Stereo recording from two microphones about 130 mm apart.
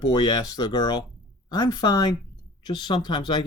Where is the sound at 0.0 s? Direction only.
35° left (ahead or behind).